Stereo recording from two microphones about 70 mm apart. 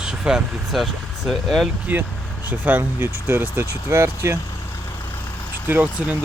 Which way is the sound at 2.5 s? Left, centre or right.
Right.